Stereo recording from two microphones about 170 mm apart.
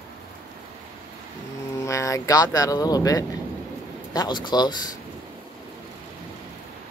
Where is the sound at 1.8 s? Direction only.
20° left (ahead or behind).